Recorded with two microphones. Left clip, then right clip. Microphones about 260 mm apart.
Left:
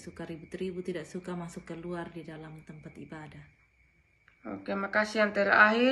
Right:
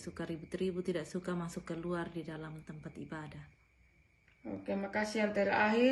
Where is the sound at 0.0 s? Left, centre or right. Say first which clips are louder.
Even; centre.